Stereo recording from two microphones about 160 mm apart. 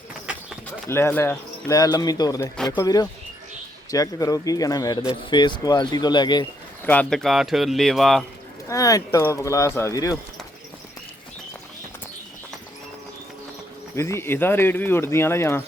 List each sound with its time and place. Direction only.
0.9 s speech: 15° left (ahead or behind)
6.8 s speech: 10° left (ahead or behind)
8.7 s speech: 20° left (ahead or behind)
13.9 s speech: 15° left (ahead or behind)